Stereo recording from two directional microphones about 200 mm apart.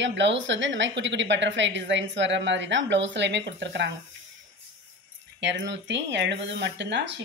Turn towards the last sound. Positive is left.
turn(degrees=-60)  # may be behind; listen again after turning